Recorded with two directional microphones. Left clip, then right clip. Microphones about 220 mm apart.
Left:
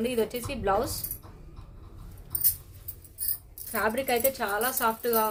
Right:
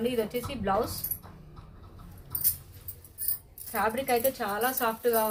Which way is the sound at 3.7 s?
45° left (ahead or behind).